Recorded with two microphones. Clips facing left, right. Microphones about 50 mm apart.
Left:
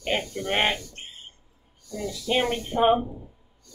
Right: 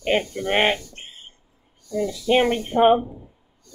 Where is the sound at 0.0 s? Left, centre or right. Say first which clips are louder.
Right 5 dB; right.